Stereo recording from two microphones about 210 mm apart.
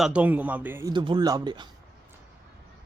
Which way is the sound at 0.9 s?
20° right (ahead or behind).